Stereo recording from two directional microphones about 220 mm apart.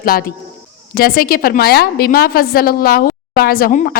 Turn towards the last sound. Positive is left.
turn(degrees=40)  # may be behind; listen again after turning